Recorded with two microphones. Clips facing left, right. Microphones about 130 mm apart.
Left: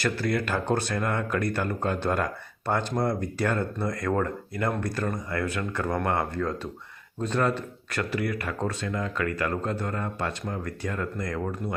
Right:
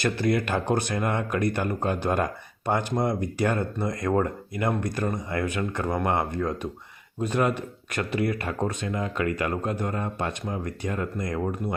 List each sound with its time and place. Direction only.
0.0 s speech: 20° right (ahead or behind)